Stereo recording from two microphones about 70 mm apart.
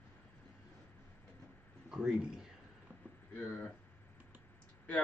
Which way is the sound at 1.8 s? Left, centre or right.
Centre.